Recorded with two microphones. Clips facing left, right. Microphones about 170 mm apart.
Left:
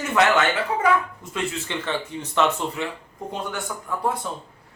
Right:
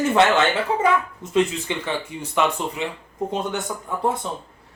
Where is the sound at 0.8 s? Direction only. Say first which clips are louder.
Right 1 dB; 20° right (ahead or behind).